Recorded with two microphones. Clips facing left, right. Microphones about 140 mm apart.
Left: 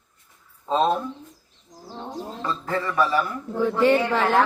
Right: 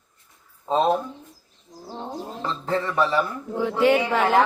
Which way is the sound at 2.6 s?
25° right (ahead or behind).